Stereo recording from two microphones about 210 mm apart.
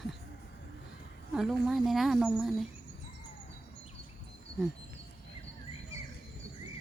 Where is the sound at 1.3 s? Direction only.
Centre (ahead or behind).